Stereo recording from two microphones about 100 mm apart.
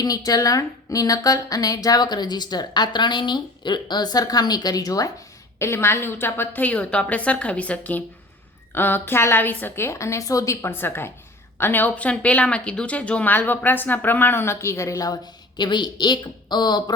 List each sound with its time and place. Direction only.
0.0 s a woman's voice: 40° left (ahead or behind)